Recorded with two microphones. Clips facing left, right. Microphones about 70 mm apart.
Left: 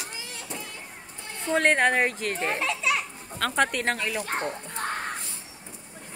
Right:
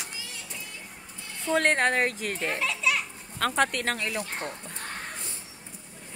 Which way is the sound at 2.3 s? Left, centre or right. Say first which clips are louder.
Left 2 dB; left.